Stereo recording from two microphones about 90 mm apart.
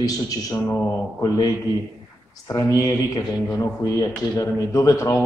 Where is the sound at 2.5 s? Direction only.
40° left (ahead or behind).